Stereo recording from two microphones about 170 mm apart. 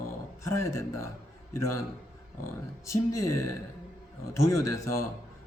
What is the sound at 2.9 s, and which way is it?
Speech, 15° left (ahead or behind).